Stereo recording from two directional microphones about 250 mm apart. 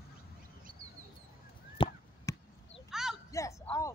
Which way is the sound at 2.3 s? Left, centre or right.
Centre.